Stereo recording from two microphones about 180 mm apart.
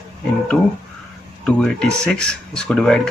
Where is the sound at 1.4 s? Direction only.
5° left (ahead or behind).